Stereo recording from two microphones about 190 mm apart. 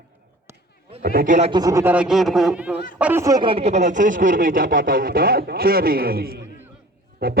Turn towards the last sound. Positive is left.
turn(degrees=-55)  # may be behind; listen again after turning